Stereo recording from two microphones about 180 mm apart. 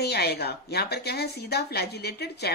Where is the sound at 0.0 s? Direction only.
60° left (ahead or behind).